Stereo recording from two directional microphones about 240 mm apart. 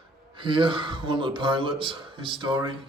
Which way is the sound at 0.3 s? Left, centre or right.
Right.